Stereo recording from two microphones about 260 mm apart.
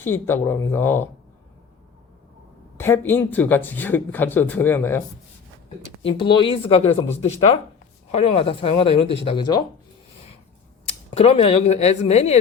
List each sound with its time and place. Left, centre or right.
0.0 s speech: centre
2.7 s speech: centre
6.0 s speech: left
10.8 s speech: left